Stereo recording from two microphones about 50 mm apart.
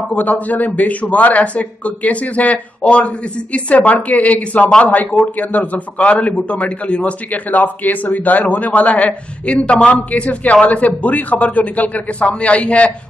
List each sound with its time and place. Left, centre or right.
0.1 s a man's voice: left
7.6 s a man's voice: left